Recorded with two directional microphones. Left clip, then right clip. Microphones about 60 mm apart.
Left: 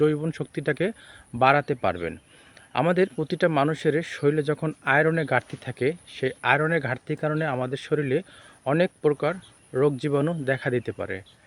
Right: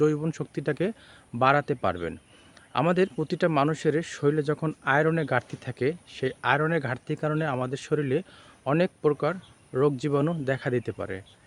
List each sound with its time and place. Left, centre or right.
0.0 s speech: right